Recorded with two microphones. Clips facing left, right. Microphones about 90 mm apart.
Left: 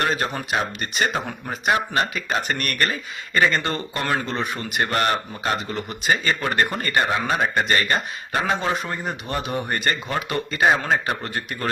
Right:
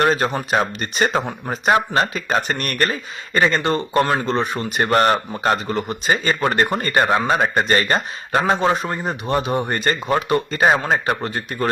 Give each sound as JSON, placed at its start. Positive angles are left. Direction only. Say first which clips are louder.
{"t": 0.0, "sound": "speech", "louder": "right 5 dB", "side_deg": -35}
{"t": 5.9, "sound": "speech", "louder": "right 1 dB", "side_deg": -30}